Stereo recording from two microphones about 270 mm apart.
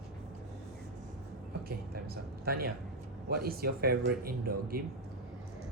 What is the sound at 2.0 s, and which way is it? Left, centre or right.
Speech, right.